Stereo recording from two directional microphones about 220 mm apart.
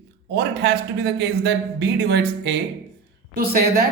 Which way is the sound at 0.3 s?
50° right (ahead or behind).